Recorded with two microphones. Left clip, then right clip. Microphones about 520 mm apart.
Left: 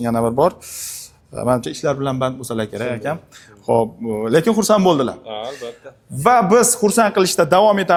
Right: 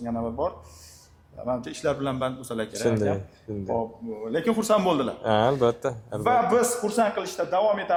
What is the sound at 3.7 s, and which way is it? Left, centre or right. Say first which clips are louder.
Speech: left 14 dB; left.